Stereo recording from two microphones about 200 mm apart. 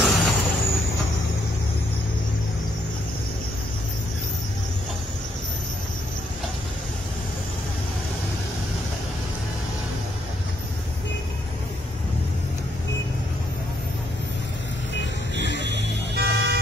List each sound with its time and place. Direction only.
0.0 s vehicle: centre (ahead or behind)
15.0 s vehicle: 60° left (ahead or behind)
15.9 s music: 55° right (ahead or behind)